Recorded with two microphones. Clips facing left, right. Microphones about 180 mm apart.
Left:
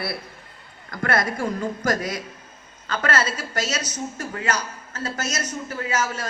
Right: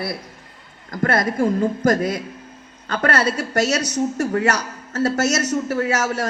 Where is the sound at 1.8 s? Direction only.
55° right (ahead or behind).